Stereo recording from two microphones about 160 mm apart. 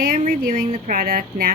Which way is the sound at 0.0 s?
65° right (ahead or behind).